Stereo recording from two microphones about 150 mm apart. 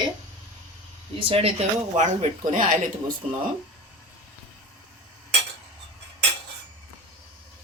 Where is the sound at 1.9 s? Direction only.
55° right (ahead or behind).